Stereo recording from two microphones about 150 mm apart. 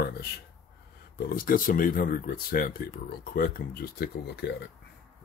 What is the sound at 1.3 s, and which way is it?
Speech, 70° left (ahead or behind).